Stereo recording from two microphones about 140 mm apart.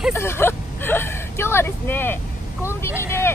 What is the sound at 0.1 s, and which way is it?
Vehicle, 15° left (ahead or behind).